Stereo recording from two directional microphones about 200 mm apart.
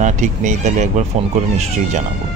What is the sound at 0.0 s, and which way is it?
Speech, 35° right (ahead or behind).